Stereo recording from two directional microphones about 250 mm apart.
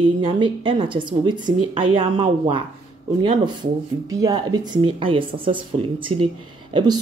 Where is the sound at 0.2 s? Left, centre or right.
Centre.